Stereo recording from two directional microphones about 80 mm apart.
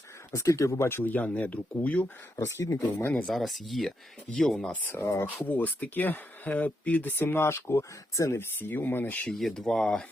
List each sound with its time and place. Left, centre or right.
0.3 s speech: left; by 2.0 s centre
2.3 s speech: left
3.1 s speech: centre
3.3 s speech: centre
4.7 s speech: left
9.4 s speech: centre